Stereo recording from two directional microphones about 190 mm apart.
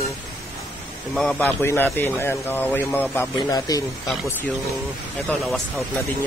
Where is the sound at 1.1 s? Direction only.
5° left (ahead or behind).